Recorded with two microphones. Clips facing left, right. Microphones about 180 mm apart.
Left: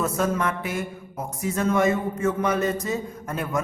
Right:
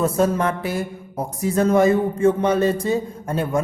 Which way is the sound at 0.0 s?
30° right (ahead or behind).